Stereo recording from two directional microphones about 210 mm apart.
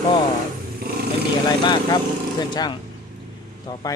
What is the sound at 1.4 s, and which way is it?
Speech, 20° left (ahead or behind).